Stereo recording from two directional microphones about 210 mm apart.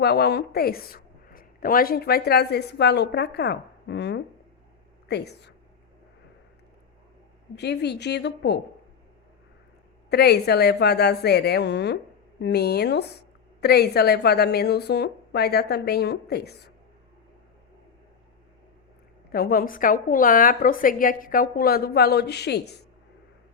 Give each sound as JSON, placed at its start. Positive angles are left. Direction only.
{"t": 0.0, "sound": "a woman's voice", "side_deg": 50}
{"t": 7.5, "sound": "a woman's voice", "side_deg": 50}
{"t": 10.1, "sound": "a woman's voice", "side_deg": 50}
{"t": 19.3, "sound": "a woman's voice", "side_deg": 45}